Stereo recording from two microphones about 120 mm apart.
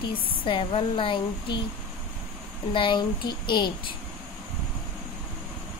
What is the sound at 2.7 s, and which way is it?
Speech, 45° left (ahead or behind).